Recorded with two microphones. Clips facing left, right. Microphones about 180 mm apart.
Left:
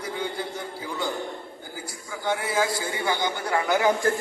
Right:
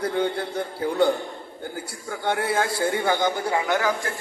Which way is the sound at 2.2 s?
65° right (ahead or behind).